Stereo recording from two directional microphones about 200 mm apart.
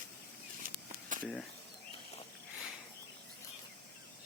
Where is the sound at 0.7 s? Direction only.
45° right (ahead or behind).